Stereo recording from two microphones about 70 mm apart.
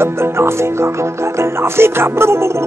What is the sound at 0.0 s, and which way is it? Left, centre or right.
Music, right.